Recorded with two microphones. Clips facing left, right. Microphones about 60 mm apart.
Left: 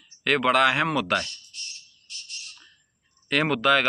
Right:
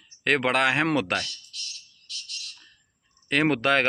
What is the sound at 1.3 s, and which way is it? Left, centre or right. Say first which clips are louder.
Frog: right 1 dB; right.